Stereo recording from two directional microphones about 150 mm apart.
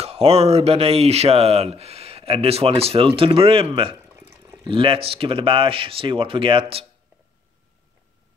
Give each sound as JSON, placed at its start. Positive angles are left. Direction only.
{"t": 0.0, "sound": "speech", "side_deg": -40}